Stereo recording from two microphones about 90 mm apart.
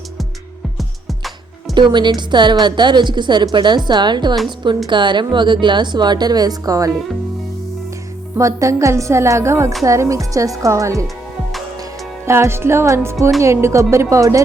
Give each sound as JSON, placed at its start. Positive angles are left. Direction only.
{"t": 0.8, "sound": "music", "side_deg": 0}
{"t": 1.7, "sound": "a woman's voice", "side_deg": -60}
{"t": 8.4, "sound": "a woman's voice", "side_deg": -35}
{"t": 12.2, "sound": "music", "side_deg": -30}
{"t": 13.4, "sound": "a woman's voice", "side_deg": -30}